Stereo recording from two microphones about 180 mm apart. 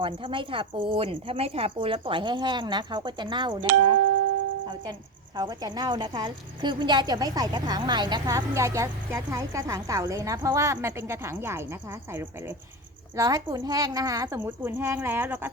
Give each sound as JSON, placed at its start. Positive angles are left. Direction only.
{"t": 0.0, "sound": "speech", "side_deg": -30}
{"t": 5.4, "sound": "a woman's voice", "side_deg": -20}